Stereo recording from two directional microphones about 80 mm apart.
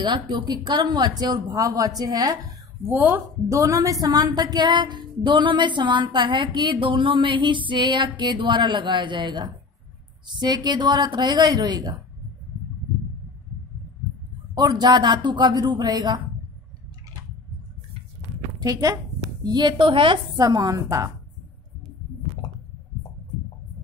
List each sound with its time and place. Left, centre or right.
0.0 s speech: right
3.4 s a woman's voice: right
4.1 s a woman's voice: right
14.6 s speech: right
18.6 s a woman's voice: right
19.4 s a woman's voice: right
20.3 s a woman's voice: right